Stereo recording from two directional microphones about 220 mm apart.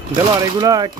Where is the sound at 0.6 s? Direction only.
15° right (ahead or behind).